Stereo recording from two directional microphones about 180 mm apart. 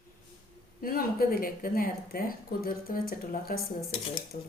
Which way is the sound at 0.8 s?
50° left (ahead or behind).